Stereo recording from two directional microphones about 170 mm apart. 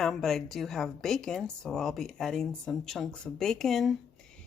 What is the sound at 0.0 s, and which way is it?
A woman's voice, centre (ahead or behind).